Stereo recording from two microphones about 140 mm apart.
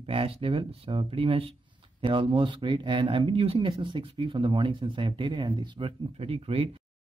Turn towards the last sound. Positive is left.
turn(degrees=-40)  # may be behind; listen again after turning